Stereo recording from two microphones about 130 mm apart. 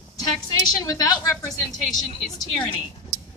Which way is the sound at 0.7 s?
30° left (ahead or behind).